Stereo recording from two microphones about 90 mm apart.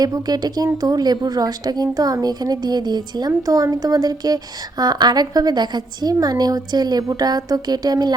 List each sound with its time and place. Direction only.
0.0 s speech: 50° right (ahead or behind)